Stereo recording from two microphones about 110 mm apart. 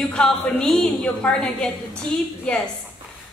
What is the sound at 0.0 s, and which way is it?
A woman's voice, 5° left (ahead or behind).